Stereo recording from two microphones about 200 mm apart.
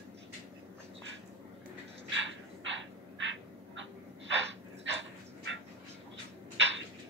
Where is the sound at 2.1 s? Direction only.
65° right (ahead or behind).